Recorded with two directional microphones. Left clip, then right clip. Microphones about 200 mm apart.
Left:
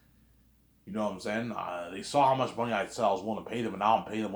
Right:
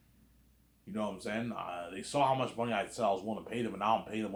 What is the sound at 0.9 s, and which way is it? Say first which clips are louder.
A man's voice: left 5 dB; 25° left (ahead or behind).